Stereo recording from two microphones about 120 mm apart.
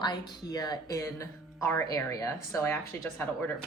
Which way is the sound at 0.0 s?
35° left (ahead or behind).